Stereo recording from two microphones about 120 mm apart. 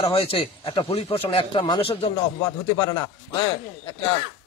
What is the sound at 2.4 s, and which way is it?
Speech, 35° left (ahead or behind).